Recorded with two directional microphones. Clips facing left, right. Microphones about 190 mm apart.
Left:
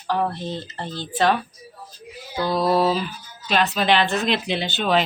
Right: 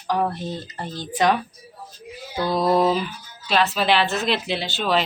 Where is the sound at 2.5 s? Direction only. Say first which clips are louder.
Right 1 dB; 20° right (ahead or behind).